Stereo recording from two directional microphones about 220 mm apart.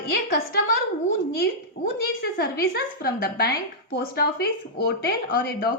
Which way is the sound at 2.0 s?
45° left (ahead or behind).